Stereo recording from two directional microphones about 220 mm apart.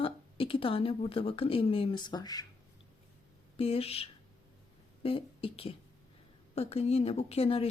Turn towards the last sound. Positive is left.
turn(degrees=25)  # may be behind; listen again after turning